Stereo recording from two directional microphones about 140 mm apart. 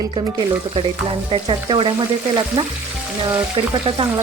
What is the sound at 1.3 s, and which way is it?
Speech, 40° right (ahead or behind).